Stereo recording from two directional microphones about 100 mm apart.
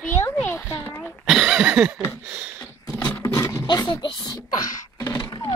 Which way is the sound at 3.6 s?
50° left (ahead or behind).